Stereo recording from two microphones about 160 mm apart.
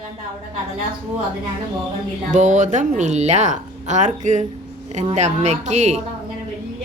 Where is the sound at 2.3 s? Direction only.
50° right (ahead or behind).